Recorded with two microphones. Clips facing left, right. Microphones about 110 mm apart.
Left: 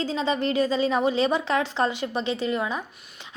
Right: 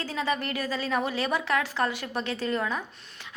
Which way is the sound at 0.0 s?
20° left (ahead or behind).